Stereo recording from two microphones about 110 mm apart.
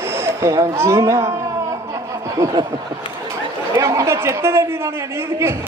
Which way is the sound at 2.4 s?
35° right (ahead or behind).